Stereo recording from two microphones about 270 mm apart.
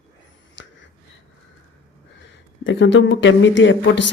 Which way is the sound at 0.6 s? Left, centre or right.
Left.